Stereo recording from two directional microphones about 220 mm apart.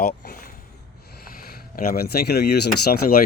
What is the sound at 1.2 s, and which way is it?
Speech, 40° left (ahead or behind).